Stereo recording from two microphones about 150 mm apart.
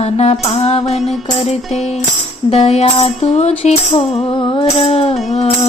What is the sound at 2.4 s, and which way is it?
Music, 40° left (ahead or behind).